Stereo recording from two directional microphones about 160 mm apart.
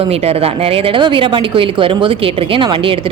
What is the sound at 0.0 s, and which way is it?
Speech, 40° right (ahead or behind).